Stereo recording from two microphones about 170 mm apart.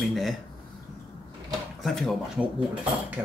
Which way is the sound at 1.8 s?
Centre (ahead or behind).